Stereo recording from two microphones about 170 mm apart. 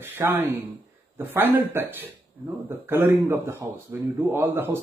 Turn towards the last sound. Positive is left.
turn(degrees=-15)  # may be behind; listen again after turning